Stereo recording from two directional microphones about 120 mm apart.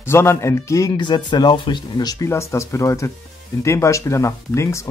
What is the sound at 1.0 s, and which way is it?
Speech, 40° left (ahead or behind).